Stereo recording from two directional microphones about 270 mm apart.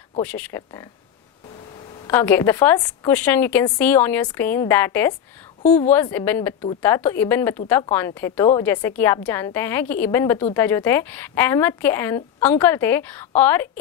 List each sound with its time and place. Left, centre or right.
0.2 s a woman's voice: centre
2.0 s a woman's voice: centre
5.6 s a woman's voice: left
5.9 s a woman's voice: centre